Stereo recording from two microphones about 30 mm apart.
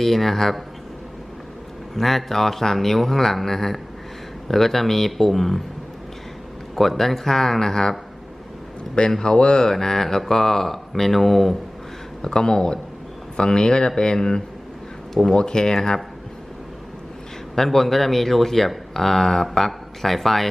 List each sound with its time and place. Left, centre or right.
0.0 s speech: centre
2.0 s speech: centre
6.7 s speech: centre
9.0 s speech: left
9.6 s speech: centre
12.2 s speech: left
17.5 s speech: centre